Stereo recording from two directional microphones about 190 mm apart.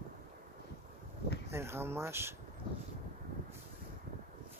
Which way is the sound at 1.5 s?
15° right (ahead or behind).